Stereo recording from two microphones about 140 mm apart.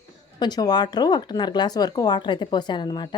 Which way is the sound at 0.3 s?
30° left (ahead or behind).